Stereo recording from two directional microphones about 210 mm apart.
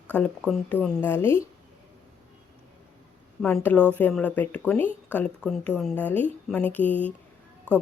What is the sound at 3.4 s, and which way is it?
Speech, 5° left (ahead or behind).